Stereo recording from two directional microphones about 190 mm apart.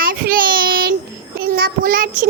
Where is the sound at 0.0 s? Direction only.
50° right (ahead or behind).